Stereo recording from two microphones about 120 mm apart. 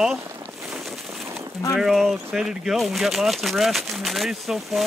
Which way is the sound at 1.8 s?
Centre (ahead or behind).